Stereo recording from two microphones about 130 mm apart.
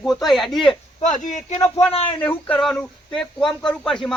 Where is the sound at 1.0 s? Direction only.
75° left (ahead or behind).